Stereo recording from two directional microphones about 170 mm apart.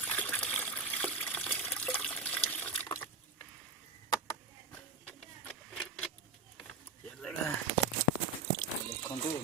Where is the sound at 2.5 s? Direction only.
10° left (ahead or behind).